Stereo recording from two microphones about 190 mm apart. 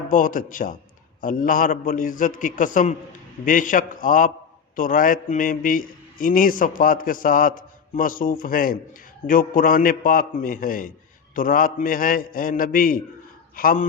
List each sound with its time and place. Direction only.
0.1 s a man's voice: 45° left (ahead or behind)